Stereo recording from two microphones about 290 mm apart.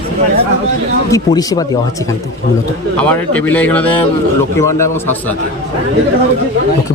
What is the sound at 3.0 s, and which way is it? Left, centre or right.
A man's voice, centre.